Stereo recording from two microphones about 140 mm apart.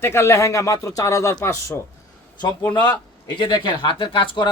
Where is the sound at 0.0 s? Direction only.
20° left (ahead or behind).